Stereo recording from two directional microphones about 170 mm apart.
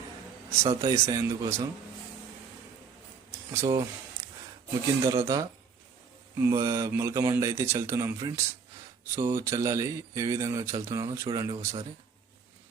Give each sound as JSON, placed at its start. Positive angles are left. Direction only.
{"t": 0.7, "sound": "speech", "side_deg": -30}
{"t": 1.0, "sound": "a man's voice", "side_deg": -20}
{"t": 3.5, "sound": "speech", "side_deg": -20}
{"t": 5.0, "sound": "a man's voice", "side_deg": -15}